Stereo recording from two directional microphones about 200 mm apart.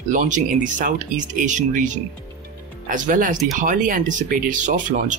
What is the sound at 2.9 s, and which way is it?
Speech, 40° right (ahead or behind).